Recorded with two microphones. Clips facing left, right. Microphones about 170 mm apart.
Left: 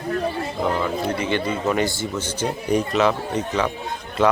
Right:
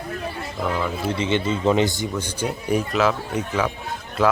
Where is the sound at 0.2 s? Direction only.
40° left (ahead or behind).